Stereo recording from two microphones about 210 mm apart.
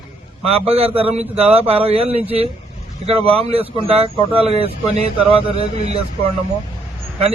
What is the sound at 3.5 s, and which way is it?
Speech, 25° right (ahead or behind).